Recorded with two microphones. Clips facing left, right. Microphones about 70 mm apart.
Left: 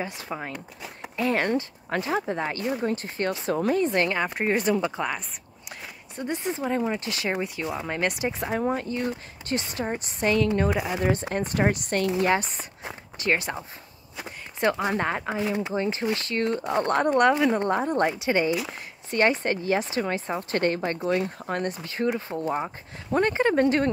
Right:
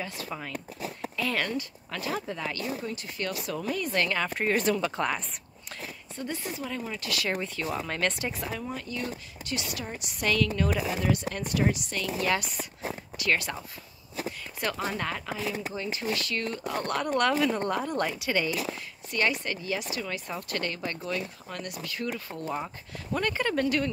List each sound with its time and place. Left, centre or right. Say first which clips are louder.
0.0 s speech: left 4 dB; left
4.9 s speech: even; centre
6.1 s speech: left 6 dB; left
6.6 s speech: left 8 dB; left
7.4 s speech: left 2 dB; centre
8.5 s speech: left 8 dB; left